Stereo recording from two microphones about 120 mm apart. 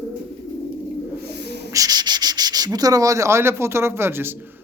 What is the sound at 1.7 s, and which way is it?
Sanding, 30° right (ahead or behind).